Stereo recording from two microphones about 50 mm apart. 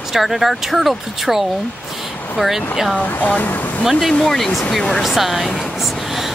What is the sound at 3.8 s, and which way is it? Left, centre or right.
Speech, centre.